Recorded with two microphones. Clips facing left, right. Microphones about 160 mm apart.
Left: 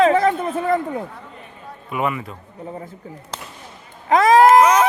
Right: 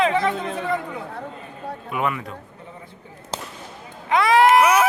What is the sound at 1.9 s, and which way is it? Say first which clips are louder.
Speech: left 2 dB; centre (ahead or behind).